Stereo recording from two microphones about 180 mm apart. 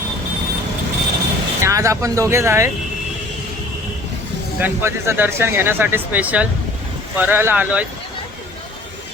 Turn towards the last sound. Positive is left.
turn(degrees=-10)  # may be behind; listen again after turning